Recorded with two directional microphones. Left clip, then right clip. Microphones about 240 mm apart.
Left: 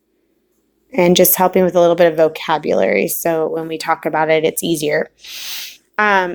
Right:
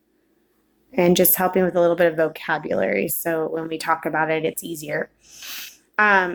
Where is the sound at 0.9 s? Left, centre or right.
Left.